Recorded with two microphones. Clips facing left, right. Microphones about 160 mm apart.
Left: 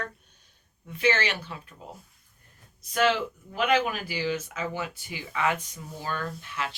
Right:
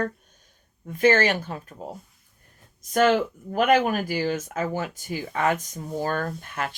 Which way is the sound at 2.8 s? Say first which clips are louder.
Right 5 dB; 45° right (ahead or behind).